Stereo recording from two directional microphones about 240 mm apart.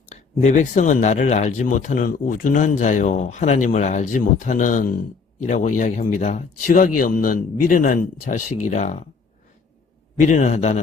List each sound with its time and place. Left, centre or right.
0.1 s speech: left
10.2 s speech: left